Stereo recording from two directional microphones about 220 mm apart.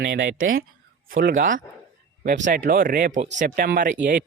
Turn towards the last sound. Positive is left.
turn(degrees=-40)  # may be behind; listen again after turning